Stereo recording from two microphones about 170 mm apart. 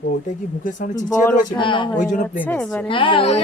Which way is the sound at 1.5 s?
30° left (ahead or behind).